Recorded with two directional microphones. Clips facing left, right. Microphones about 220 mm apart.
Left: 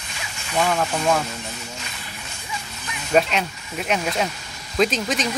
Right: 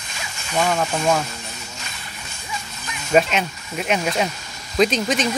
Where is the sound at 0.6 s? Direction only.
5° right (ahead or behind).